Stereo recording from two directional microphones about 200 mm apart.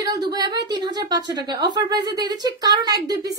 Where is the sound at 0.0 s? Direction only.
20° right (ahead or behind).